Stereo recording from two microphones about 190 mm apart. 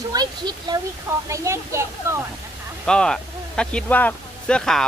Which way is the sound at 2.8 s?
5° left (ahead or behind).